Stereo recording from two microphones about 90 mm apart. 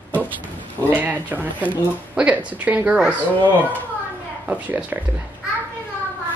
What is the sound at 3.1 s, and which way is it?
Speech, 20° left (ahead or behind).